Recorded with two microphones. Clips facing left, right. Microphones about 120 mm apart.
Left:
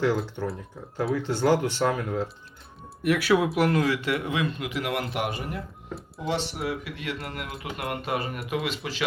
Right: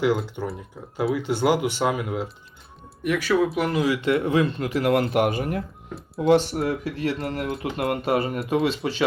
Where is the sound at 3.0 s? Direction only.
5° left (ahead or behind).